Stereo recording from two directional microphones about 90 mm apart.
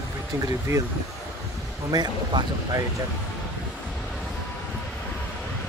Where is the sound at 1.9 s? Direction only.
50° right (ahead or behind).